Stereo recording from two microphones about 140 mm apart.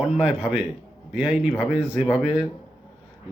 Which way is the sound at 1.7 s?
35° left (ahead or behind).